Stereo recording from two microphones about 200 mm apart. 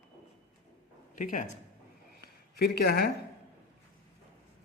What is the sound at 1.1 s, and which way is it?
Speech, 40° left (ahead or behind).